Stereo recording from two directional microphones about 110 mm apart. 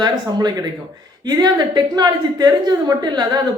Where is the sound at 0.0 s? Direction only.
35° right (ahead or behind).